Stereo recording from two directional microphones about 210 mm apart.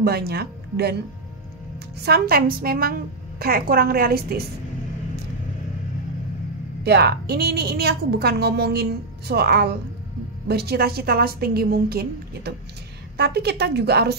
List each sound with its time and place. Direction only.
0.0 s speech: 50° right (ahead or behind)
2.0 s a woman's voice: 45° right (ahead or behind)
6.8 s a woman's voice: 50° right (ahead or behind)